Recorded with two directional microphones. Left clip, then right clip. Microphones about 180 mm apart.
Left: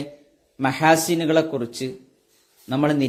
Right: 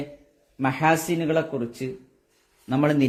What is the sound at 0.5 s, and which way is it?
A man's voice, 10° left (ahead or behind).